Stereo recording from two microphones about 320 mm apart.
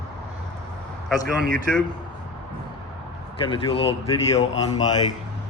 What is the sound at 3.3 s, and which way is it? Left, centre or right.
Speech, centre.